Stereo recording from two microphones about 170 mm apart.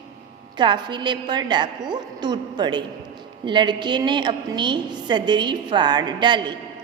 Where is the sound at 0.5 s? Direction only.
25° right (ahead or behind).